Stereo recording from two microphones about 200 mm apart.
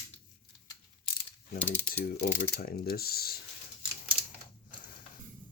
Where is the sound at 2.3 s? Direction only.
45° left (ahead or behind).